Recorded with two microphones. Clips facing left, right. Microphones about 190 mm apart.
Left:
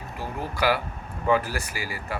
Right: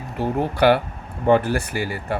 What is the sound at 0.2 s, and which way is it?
Speech, 65° right (ahead or behind).